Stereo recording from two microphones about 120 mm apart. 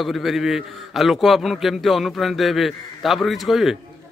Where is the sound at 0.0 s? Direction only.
Centre (ahead or behind).